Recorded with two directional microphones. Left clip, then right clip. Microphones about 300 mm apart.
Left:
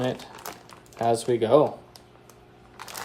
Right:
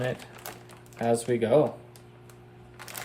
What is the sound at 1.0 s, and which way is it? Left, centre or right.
Speech, centre.